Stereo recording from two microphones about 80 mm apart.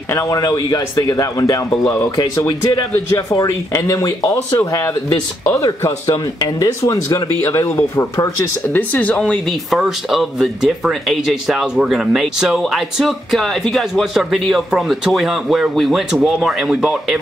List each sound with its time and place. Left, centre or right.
0.1 s speech: left
2.1 s speech: left
3.3 s speech: left
5.6 s speech: left
7.4 s speech: left
8.7 s speech: centre
9.7 s speech: centre